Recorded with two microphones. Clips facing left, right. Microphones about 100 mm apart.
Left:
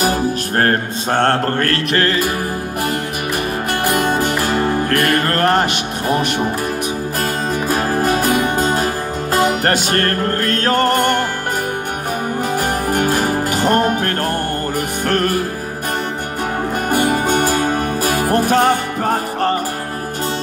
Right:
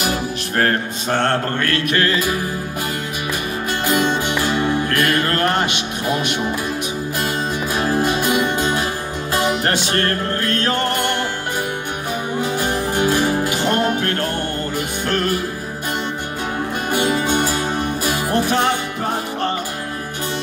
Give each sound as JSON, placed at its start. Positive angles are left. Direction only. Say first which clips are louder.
{"t": 0.0, "sound": "music", "louder": "left 5 dB", "side_deg": 40}
{"t": 3.8, "sound": "music", "louder": "left 1 dB", "side_deg": 55}
{"t": 7.7, "sound": "music", "louder": "left 2 dB", "side_deg": 45}
{"t": 12.4, "sound": "music", "louder": "even", "side_deg": 45}
{"t": 16.9, "sound": "music", "louder": "left 2 dB", "side_deg": 50}